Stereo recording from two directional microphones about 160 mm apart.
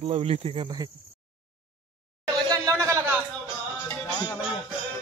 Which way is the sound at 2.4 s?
25° right (ahead or behind).